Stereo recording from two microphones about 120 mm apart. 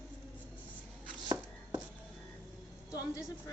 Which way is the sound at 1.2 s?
35° right (ahead or behind).